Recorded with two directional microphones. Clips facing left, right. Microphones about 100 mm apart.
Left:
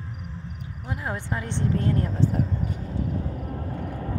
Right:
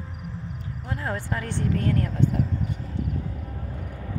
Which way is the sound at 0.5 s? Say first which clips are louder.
Even; 15° left (ahead or behind).